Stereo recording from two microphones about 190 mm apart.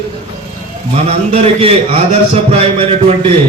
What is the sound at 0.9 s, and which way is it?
A man's voice, 35° right (ahead or behind).